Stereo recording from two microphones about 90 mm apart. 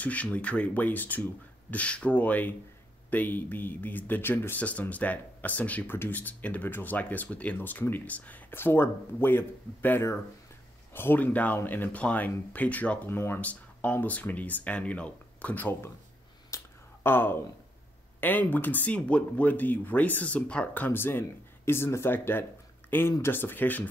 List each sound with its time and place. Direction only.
0.0 s speech: 15° left (ahead or behind)
16.4 s a sound: 30° left (ahead or behind)
18.2 s speech: 20° left (ahead or behind)